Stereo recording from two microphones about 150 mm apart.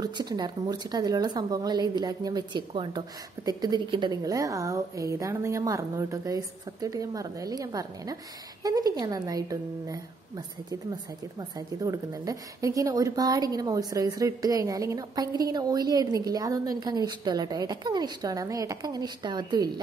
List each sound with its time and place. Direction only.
0.0 s a woman's voice: 25° right (ahead or behind)